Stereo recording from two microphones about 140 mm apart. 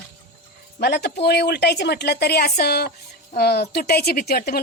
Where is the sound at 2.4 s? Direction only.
90° left.